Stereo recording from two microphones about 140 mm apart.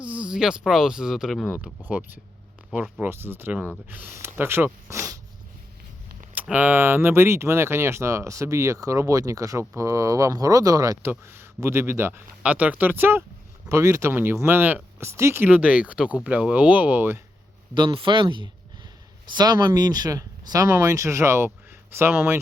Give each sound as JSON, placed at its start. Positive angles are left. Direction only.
{"t": 0.0, "sound": "speech", "side_deg": -10}
{"t": 1.6, "sound": "speech", "side_deg": -10}
{"t": 6.3, "sound": "speech", "side_deg": -10}
{"t": 17.7, "sound": "speech", "side_deg": -35}